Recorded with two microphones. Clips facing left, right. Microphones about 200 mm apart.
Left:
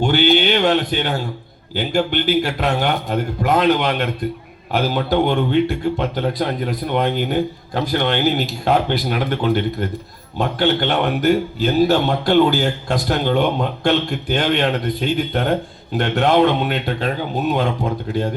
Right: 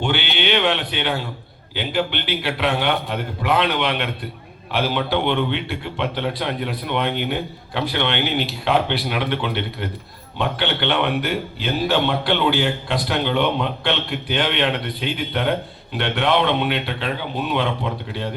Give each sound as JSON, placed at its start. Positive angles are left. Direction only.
{"t": 0.0, "sound": "a man's voice", "side_deg": 40}